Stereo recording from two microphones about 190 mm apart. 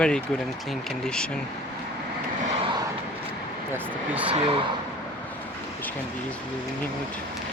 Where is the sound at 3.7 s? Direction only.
10° right (ahead or behind).